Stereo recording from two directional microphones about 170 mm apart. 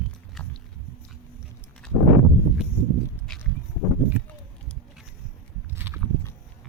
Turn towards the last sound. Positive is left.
turn(degrees=-10)  # may be behind; listen again after turning